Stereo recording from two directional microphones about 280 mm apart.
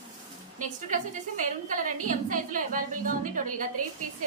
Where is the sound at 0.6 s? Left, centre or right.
Right.